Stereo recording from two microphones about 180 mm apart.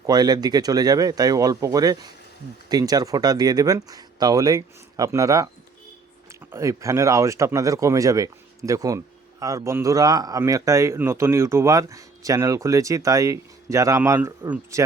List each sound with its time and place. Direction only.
0.0 s speech: 20° right (ahead or behind)
6.5 s speech: 15° right (ahead or behind)